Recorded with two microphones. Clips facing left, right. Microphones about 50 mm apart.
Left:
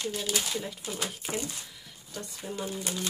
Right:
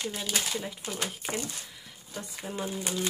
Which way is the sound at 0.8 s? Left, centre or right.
Right.